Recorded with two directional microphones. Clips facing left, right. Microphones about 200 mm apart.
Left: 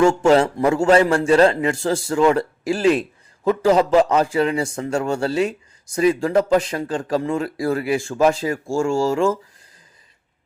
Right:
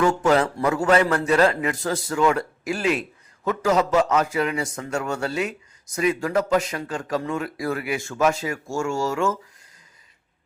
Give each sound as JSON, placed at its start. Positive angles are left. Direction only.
{"t": 0.0, "sound": "a man's voice", "side_deg": 25}